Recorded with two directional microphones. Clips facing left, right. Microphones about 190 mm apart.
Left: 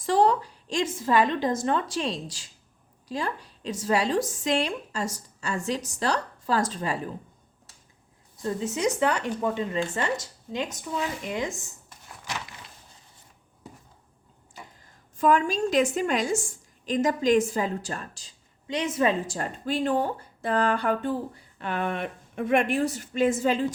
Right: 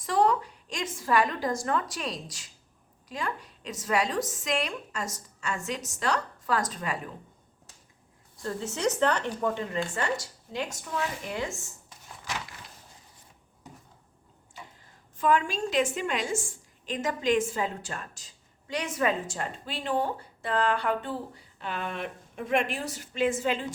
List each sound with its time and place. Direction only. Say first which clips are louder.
0.0 s a woman's voice: left 3 dB; 30° left (ahead or behind)
8.4 s speech: left 4 dB; 15° left (ahead or behind)
15.2 s a woman's voice: left 3 dB; 45° left (ahead or behind); by 19.4 s 25° left (ahead or behind)
19.4 s speech: left 7 dB; 45° left (ahead or behind)